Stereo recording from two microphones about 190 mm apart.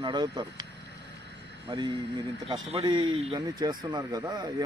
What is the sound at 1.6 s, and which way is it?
Speech, 25° right (ahead or behind).